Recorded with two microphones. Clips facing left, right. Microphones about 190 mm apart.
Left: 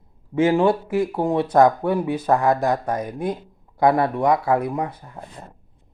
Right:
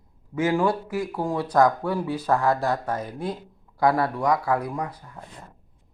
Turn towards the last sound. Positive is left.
turn(degrees=25)  # may be behind; listen again after turning